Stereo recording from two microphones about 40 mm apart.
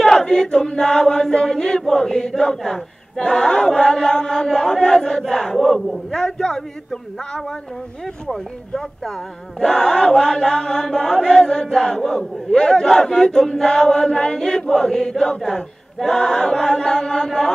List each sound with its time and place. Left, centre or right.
0.0 s choir: centre
8.3 s speech: centre
9.6 s choir: centre